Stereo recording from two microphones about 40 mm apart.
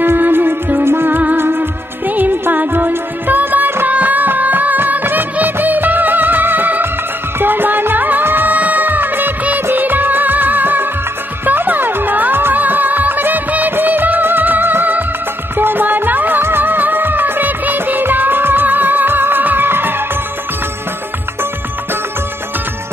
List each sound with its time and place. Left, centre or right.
0.0 s music: right
0.8 s music: right
2.0 s music: right
5.0 s music of bollywood: right
7.3 s music: right
12.5 s music of bollywood: right
15.5 s music: right
16.4 s music of bollywood: right